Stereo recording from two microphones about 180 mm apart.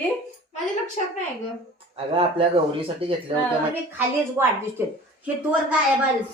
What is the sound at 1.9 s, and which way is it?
Speech, 30° right (ahead or behind).